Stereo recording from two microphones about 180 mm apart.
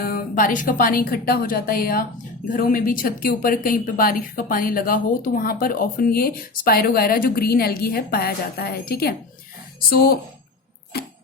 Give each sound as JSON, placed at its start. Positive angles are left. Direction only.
{"t": 0.0, "sound": "speech", "side_deg": 50}
{"t": 10.9, "sound": "tick-tock", "side_deg": 60}